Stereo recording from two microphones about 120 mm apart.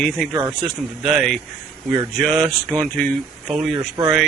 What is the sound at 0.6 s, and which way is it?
A man's voice, centre (ahead or behind).